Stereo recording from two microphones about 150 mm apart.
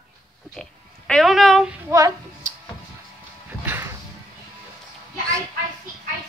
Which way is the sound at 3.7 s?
15° right (ahead or behind).